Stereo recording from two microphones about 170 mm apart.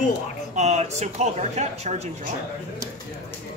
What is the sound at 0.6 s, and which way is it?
Speech, 40° right (ahead or behind).